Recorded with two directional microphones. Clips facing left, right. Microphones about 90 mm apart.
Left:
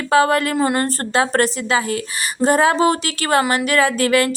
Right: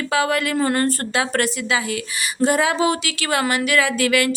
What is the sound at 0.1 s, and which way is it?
Speech, 40° left (ahead or behind).